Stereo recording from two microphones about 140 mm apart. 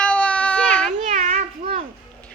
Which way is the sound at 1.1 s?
60° right (ahead or behind).